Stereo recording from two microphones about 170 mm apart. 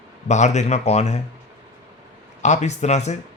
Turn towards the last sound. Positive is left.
turn(degrees=40)  # may be behind; listen again after turning